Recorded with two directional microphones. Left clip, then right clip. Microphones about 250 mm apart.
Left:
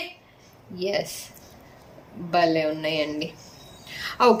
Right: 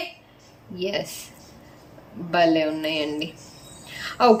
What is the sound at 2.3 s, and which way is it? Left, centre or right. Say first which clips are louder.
A woman's voice: right 2 dB; centre.